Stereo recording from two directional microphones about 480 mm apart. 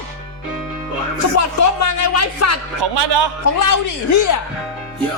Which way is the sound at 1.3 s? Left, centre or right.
Left.